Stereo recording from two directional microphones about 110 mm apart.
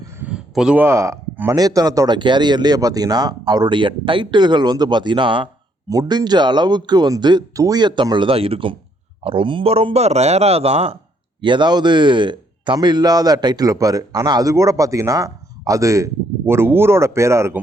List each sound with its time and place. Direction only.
0.2 s a sound: 5° right (ahead or behind)
0.8 s speech: 25° right (ahead or behind); by 5.5 s 50° right (ahead or behind)
5.9 s speech: 35° right (ahead or behind); by 10.9 s 65° right (ahead or behind)
11.3 s speech: 45° right (ahead or behind); by 17.5 s 25° right (ahead or behind)